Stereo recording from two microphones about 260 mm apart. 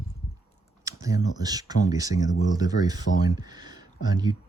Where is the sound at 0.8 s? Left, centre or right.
Centre.